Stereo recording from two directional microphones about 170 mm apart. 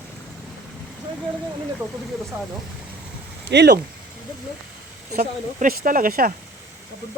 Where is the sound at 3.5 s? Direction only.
90° right.